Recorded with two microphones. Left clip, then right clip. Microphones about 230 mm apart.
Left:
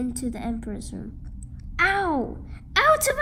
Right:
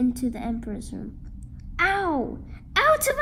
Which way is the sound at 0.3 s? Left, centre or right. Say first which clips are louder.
Right 1 dB; left.